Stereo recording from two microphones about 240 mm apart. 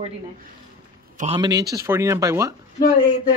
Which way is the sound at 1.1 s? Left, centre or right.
Right.